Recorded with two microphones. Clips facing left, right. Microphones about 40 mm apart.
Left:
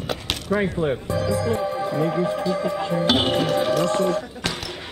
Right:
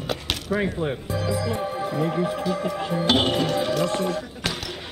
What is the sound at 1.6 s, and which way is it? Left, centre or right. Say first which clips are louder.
Music: left 3 dB; right.